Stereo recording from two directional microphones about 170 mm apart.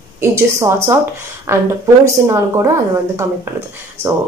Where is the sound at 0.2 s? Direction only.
15° right (ahead or behind).